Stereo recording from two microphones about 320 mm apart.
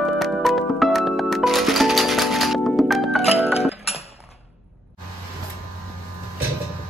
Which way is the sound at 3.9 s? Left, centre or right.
Centre.